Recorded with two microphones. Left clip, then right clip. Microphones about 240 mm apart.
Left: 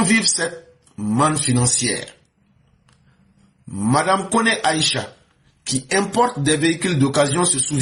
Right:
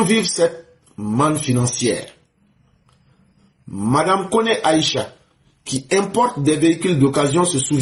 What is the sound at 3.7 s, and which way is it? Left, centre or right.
A man's voice, left.